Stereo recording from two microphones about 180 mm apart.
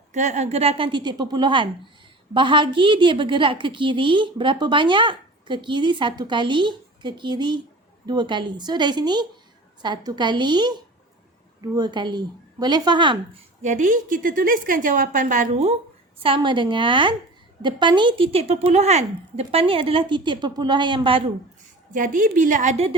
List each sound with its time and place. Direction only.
0.1 s a woman's voice: 40° right (ahead or behind); by 13.4 s 25° right (ahead or behind)
13.6 s a woman's voice: 45° right (ahead or behind)
16.2 s a woman's voice: 30° right (ahead or behind)
21.9 s a woman's voice: 45° right (ahead or behind)